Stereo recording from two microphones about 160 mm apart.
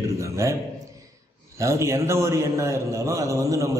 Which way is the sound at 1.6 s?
15° right (ahead or behind).